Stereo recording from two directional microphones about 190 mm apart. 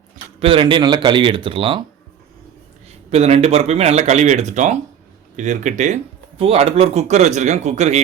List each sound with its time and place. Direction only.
0.3 s speech: 30° right (ahead or behind)
3.1 s speech: 35° right (ahead or behind)